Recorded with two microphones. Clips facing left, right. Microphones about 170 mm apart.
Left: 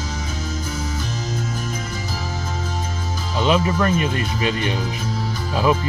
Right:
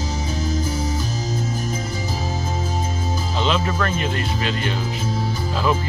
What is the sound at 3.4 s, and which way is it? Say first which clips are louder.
Speech: left 4 dB; 10° left (ahead or behind).